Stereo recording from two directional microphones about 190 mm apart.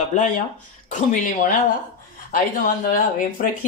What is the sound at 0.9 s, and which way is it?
Speech, 45° left (ahead or behind).